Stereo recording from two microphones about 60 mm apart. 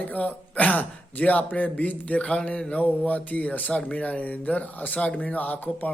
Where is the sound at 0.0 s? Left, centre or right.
Left.